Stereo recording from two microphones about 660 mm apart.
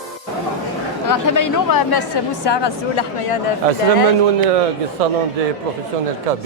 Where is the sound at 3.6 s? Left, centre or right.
Right.